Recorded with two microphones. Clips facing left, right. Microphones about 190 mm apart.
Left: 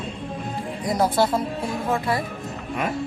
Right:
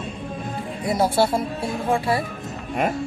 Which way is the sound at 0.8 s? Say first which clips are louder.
Right 1 dB; 10° right (ahead or behind).